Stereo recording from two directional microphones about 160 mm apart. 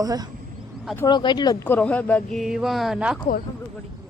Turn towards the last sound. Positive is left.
turn(degrees=-5)  # may be behind; listen again after turning